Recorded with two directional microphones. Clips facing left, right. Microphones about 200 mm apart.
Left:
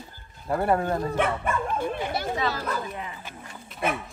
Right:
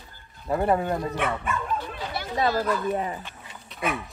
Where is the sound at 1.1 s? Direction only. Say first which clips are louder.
Left 2 dB; 50° left (ahead or behind).